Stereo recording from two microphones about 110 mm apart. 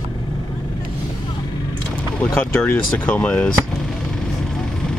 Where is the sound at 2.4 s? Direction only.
10° left (ahead or behind).